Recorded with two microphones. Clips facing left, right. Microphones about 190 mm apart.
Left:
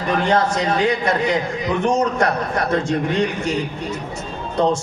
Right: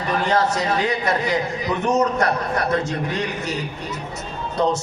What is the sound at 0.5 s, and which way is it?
A man's voice, 30° left (ahead or behind).